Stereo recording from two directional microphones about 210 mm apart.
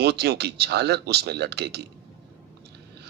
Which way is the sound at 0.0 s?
50° right (ahead or behind).